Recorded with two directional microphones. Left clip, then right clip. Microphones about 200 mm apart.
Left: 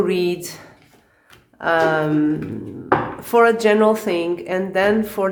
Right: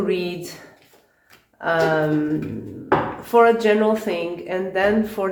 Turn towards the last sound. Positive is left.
turn(degrees=40)  # may be behind; listen again after turning